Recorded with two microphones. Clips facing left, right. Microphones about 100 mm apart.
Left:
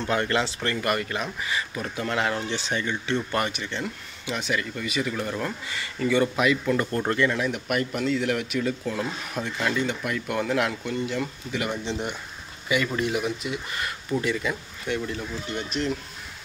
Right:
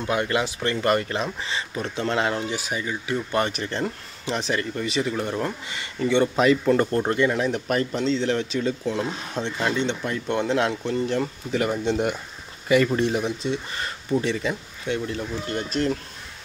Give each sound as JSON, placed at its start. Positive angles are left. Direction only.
{"t": 0.0, "sound": "speech", "side_deg": -15}
{"t": 3.3, "sound": "speech", "side_deg": -25}
{"t": 3.5, "sound": "speech", "side_deg": -35}
{"t": 7.0, "sound": "speech", "side_deg": -20}
{"t": 11.8, "sound": "speech", "side_deg": -50}